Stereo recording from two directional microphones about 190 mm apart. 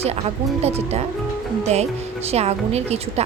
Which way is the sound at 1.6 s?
35° right (ahead or behind).